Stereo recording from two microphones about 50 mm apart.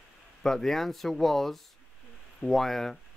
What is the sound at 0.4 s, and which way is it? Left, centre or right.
Speech, centre.